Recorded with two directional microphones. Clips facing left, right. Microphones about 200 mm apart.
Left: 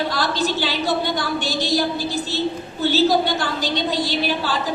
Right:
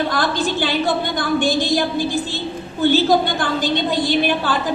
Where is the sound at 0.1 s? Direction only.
50° right (ahead or behind).